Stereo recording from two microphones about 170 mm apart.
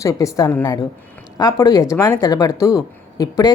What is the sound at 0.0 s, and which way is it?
A woman's voice, 20° left (ahead or behind).